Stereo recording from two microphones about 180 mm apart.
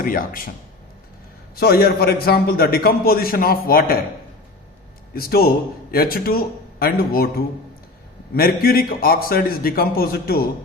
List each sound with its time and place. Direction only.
0.0 s speech: 50° left (ahead or behind)
1.5 s a man's voice: 60° left (ahead or behind)
5.1 s a man's voice: 60° left (ahead or behind)